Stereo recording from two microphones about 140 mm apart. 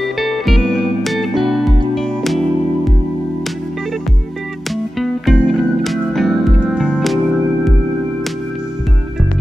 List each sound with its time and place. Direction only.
0.0 s music: centre (ahead or behind)
5.0 s music: 5° right (ahead or behind)